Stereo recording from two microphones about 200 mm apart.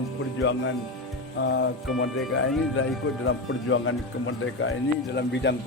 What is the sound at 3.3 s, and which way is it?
Speech, 90° left.